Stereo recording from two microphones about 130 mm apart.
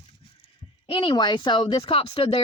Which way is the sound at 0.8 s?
40° left (ahead or behind).